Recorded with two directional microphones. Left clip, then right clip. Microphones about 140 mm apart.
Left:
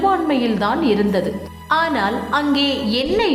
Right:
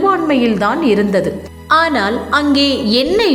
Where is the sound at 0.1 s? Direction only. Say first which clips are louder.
Right 4 dB; 25° right (ahead or behind).